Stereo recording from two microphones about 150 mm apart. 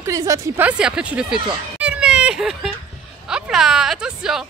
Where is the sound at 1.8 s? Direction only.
10° right (ahead or behind).